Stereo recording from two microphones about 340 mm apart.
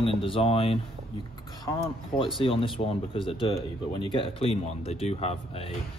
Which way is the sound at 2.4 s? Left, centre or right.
Centre.